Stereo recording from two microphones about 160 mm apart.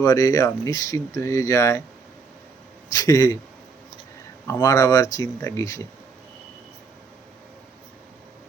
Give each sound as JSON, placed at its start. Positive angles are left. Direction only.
{"t": 0.0, "sound": "speech", "side_deg": 20}
{"t": 2.9, "sound": "speech", "side_deg": 20}
{"t": 4.4, "sound": "speech", "side_deg": 20}